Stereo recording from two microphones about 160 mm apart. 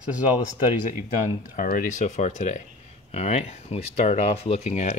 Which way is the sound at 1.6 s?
60° left (ahead or behind).